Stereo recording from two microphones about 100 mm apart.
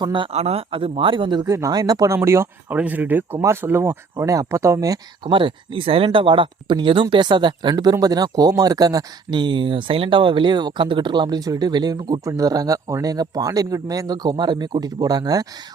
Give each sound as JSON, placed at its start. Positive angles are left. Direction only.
{"t": 0.0, "sound": "speech", "side_deg": -55}
{"t": 0.3, "sound": "speech", "side_deg": -90}
{"t": 1.5, "sound": "speech", "side_deg": -35}
{"t": 2.1, "sound": "speech", "side_deg": -25}
{"t": 2.7, "sound": "speech", "side_deg": -15}
{"t": 5.2, "sound": "speech", "side_deg": -55}